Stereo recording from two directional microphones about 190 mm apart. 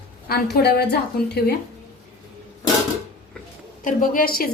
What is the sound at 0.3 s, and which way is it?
A woman's voice, 60° left (ahead or behind).